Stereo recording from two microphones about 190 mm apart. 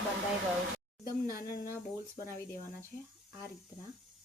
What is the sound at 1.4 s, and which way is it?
Speech, 55° left (ahead or behind).